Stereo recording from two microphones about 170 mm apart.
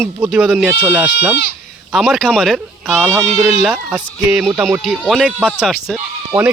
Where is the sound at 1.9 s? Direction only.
Centre (ahead or behind).